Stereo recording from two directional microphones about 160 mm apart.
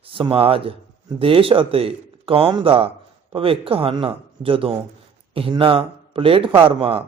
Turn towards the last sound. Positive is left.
turn(degrees=-35)  # may be behind; listen again after turning